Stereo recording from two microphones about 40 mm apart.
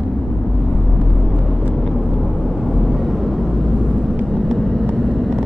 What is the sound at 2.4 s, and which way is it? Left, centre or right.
Vehicle, centre.